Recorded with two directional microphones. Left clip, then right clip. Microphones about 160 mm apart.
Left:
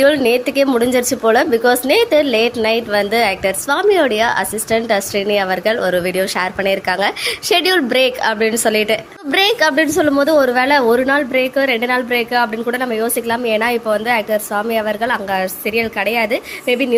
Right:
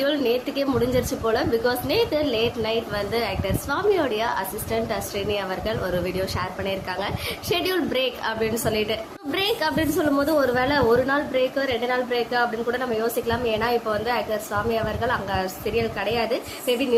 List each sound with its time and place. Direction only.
0.0 s a woman's voice: 40° left (ahead or behind)